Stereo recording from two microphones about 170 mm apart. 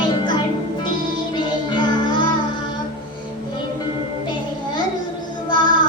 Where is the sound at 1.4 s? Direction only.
25° left (ahead or behind).